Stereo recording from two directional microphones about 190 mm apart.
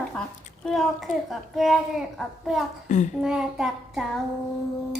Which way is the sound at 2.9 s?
40° left (ahead or behind).